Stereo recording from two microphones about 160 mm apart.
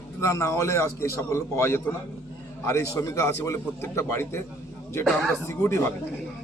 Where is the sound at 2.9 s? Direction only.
15° left (ahead or behind).